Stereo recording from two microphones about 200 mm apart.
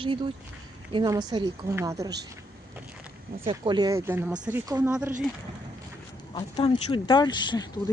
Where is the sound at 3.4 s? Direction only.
25° right (ahead or behind); by 5.1 s 5° right (ahead or behind).